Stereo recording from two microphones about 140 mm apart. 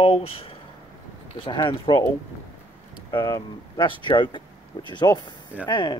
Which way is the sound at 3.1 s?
35° left (ahead or behind).